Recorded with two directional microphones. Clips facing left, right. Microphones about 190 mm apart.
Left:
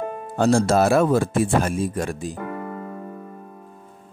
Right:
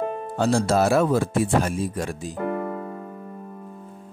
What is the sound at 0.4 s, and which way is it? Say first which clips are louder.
Speech: left 3 dB; 50° left (ahead or behind).